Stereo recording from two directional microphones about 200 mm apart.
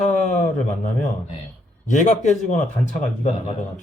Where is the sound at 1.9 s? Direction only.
35° left (ahead or behind).